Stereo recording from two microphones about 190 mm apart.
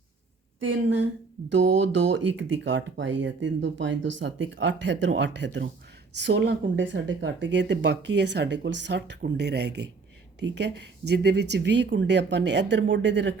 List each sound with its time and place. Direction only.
0.6 s speech: 75° right (ahead or behind)
2.0 s speech: 70° right (ahead or behind)